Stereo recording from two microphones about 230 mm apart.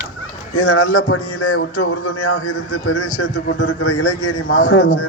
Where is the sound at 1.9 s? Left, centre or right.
Left.